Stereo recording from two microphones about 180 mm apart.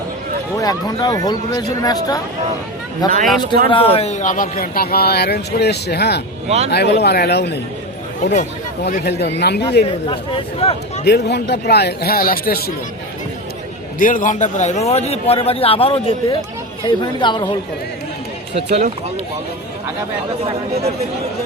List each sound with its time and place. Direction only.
0.6 s a man's voice: 20° left (ahead or behind); by 7.6 s 70° left (ahead or behind)
8.2 s a man's voice: 40° left (ahead or behind)
8.9 s speech: 65° left (ahead or behind)
10.1 s a man's voice: 30° left (ahead or behind)
11.0 s a man's voice: 65° left (ahead or behind)
14.0 s a man's voice: 45° left (ahead or behind); by 17.6 s 25° left (ahead or behind)
18.5 s speech: 35° right (ahead or behind)
20.4 s speech: 35° right (ahead or behind)